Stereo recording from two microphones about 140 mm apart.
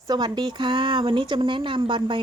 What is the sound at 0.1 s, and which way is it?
Speech, 30° right (ahead or behind).